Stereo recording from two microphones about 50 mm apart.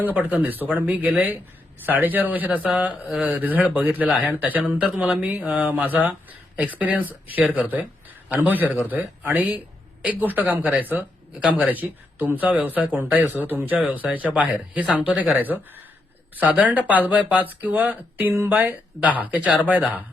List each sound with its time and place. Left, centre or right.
0.0 s speech: right